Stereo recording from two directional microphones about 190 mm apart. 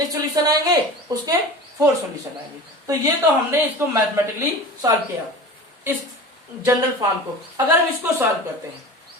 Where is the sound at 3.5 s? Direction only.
15° right (ahead or behind).